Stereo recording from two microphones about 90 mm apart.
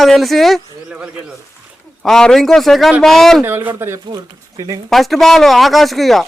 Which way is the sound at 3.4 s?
20° right (ahead or behind).